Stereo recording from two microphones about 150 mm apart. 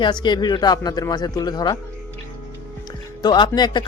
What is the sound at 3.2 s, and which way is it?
Speech, 30° left (ahead or behind).